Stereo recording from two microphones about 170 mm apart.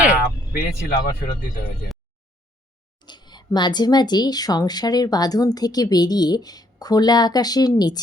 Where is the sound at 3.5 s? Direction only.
25° left (ahead or behind).